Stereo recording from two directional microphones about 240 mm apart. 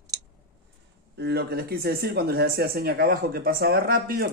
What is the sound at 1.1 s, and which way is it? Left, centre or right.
Speech, right.